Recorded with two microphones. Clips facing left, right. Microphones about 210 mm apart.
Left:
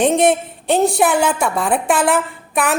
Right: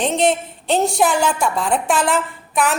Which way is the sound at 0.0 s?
55° left (ahead or behind).